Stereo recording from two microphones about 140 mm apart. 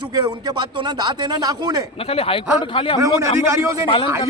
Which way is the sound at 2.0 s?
45° left (ahead or behind).